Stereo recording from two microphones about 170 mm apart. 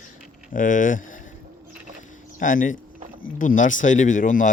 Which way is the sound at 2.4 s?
50° left (ahead or behind).